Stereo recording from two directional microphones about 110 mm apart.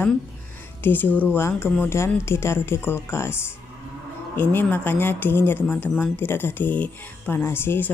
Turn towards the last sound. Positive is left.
turn(degrees=20)  # may be behind; listen again after turning